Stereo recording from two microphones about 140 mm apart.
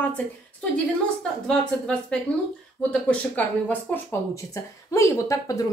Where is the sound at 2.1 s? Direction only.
5° left (ahead or behind).